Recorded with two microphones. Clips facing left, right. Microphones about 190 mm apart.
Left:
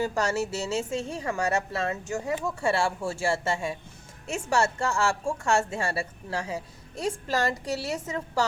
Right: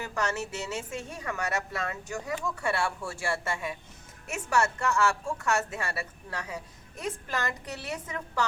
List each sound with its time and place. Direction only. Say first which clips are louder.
0.0 s a woman's voice: left 5 dB; 30° left (ahead or behind)